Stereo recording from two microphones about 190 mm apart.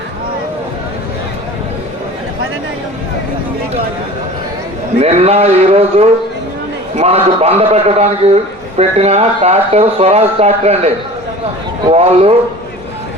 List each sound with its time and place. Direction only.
4.9 s speech: 30° right (ahead or behind)
11.9 s speech: 35° right (ahead or behind)